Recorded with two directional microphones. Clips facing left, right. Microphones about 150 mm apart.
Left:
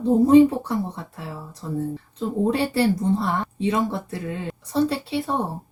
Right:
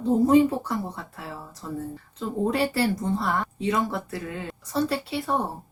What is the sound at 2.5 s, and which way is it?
Speech, 30° left (ahead or behind).